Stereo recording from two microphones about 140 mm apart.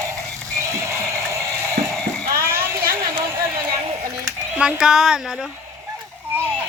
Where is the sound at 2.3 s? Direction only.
90° right.